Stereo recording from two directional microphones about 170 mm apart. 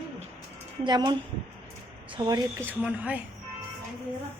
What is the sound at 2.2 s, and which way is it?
Speech, 25° right (ahead or behind).